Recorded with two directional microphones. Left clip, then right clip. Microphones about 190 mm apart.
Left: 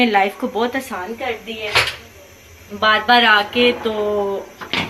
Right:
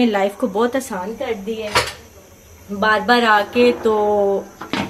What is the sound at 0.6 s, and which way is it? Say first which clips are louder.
Speech: right 2 dB; 50° right (ahead or behind).